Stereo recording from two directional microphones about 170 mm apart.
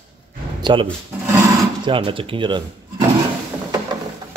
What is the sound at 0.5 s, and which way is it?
Speech, 25° right (ahead or behind).